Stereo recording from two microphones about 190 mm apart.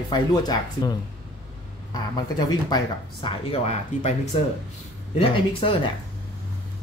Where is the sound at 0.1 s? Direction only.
20° left (ahead or behind).